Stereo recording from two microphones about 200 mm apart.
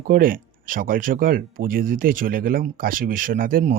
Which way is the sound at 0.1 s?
45° right (ahead or behind).